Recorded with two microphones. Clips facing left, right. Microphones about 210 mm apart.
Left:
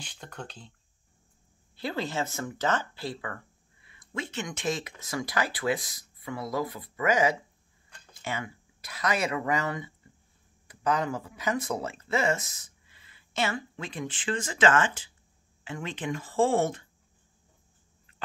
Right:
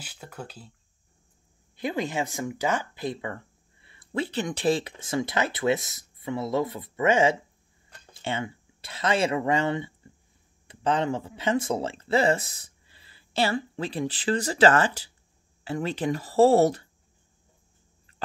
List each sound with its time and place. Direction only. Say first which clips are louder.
0.0 s speech: right 2 dB; 5° right (ahead or behind)
1.8 s speech: right 3 dB; 15° right (ahead or behind); by 16.8 s 40° right (ahead or behind)